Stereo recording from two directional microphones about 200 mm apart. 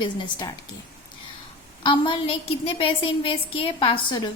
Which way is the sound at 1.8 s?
25° left (ahead or behind).